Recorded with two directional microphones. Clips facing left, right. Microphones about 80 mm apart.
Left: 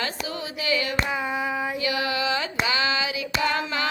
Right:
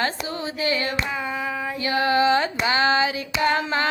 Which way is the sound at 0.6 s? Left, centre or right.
Right.